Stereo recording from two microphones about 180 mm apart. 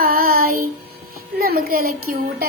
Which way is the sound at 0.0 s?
55° right (ahead or behind).